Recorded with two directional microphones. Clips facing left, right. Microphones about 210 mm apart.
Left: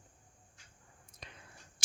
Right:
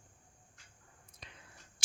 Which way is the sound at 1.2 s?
45° left (ahead or behind).